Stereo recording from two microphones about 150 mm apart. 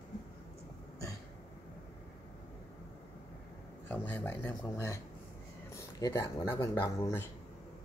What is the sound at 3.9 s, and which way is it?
Speech, 10° left (ahead or behind).